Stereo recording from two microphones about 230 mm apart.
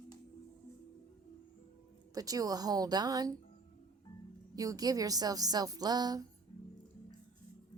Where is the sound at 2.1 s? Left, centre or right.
Centre.